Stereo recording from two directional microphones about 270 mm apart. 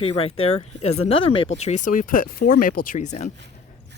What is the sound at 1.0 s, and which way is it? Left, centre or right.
Speech, centre.